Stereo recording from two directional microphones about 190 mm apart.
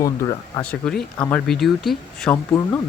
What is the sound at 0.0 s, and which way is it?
Speech, 20° left (ahead or behind).